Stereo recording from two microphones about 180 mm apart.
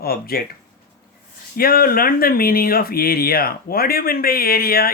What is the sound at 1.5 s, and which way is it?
Speech, 55° left (ahead or behind).